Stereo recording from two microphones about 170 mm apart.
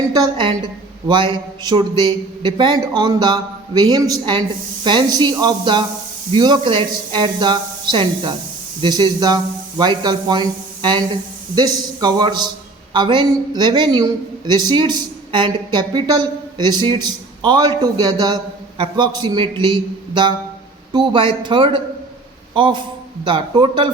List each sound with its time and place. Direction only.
0.1 s a woman's voice: 25° right (ahead or behind)